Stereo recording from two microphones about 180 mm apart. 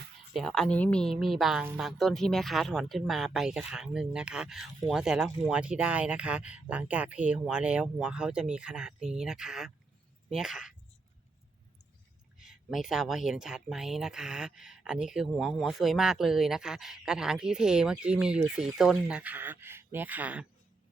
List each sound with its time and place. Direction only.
0.3 s speech: 5° left (ahead or behind)
12.4 s speech: centre (ahead or behind)